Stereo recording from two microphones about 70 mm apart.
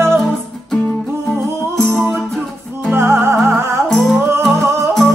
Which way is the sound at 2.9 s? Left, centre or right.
Right.